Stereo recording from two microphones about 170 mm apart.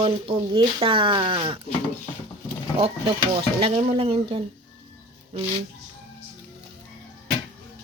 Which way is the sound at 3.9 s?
35° right (ahead or behind).